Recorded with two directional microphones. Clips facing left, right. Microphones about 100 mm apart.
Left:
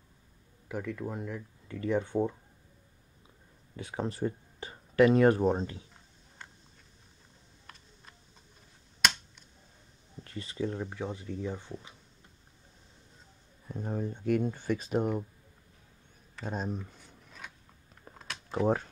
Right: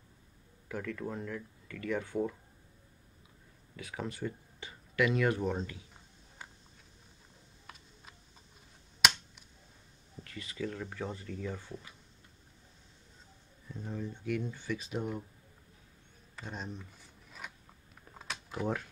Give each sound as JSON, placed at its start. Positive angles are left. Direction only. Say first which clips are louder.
{"t": 0.7, "sound": "speech", "louder": "left 2 dB", "side_deg": 15}
{"t": 1.7, "sound": "speech", "louder": "left 5 dB", "side_deg": 25}
{"t": 3.7, "sound": "speech", "louder": "left 5 dB", "side_deg": 30}
{"t": 7.6, "sound": "typing", "louder": "right 1 dB", "side_deg": -5}
{"t": 10.2, "sound": "speech", "louder": "left 4 dB", "side_deg": 30}
{"t": 11.0, "sound": "speech", "louder": "left 3 dB", "side_deg": 15}
{"t": 13.7, "sound": "speech", "louder": "left 5 dB", "side_deg": 50}
{"t": 16.4, "sound": "speech", "louder": "left 7 dB", "side_deg": 40}
{"t": 18.1, "sound": "a sound", "louder": "right 1 dB", "side_deg": -5}